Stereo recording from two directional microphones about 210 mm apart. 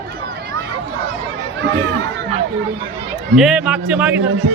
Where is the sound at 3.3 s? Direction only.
5° right (ahead or behind).